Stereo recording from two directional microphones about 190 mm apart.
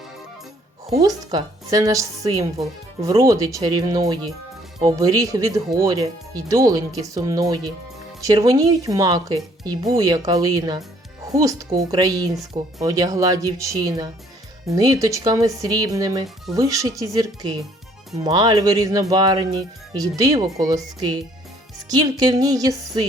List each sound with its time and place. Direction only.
1.0 s speech: 20° right (ahead or behind)
21.8 s speech: 20° right (ahead or behind)